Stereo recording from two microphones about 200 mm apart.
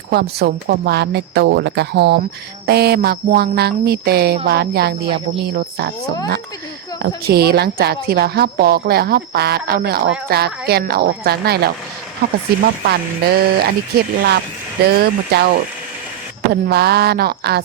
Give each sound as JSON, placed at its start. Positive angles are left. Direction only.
{"t": 0.1, "sound": "a woman's voice", "side_deg": -55}
{"t": 7.3, "sound": "a woman's voice", "side_deg": -50}
{"t": 12.8, "sound": "a woman's voice", "side_deg": -55}